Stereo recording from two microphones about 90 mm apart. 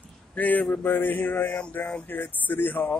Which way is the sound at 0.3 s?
20° left (ahead or behind).